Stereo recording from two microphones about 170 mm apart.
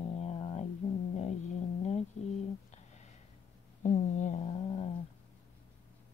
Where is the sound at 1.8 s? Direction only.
40° left (ahead or behind).